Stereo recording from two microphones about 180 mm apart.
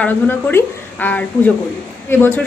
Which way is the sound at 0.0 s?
10° left (ahead or behind).